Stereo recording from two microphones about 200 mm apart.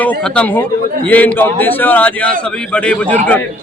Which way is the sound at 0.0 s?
10° left (ahead or behind).